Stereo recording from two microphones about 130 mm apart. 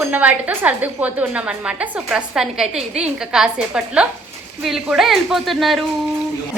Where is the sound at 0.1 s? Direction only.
10° right (ahead or behind).